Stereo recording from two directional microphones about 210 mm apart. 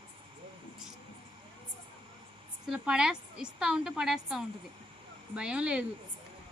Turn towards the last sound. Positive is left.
turn(degrees=-5)  # may be behind; listen again after turning